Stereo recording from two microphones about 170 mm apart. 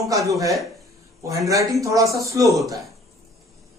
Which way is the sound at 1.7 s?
20° right (ahead or behind).